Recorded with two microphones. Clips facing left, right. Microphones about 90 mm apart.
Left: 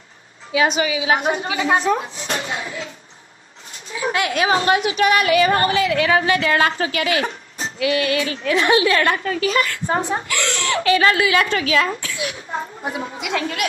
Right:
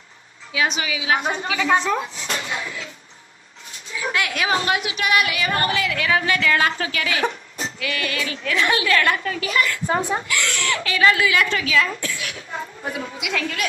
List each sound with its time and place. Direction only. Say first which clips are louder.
0.5 s speech: left 5 dB; 40° left (ahead or behind)
1.3 s speech: left 1 dB; 25° left (ahead or behind)
3.9 s a woman's voice: left 4 dB; 30° left (ahead or behind)